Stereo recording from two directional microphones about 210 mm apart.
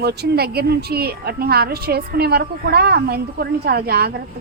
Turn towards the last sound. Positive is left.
turn(degrees=-50)  # may be behind; listen again after turning